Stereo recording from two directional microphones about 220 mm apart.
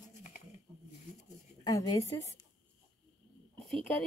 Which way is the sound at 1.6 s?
15° left (ahead or behind).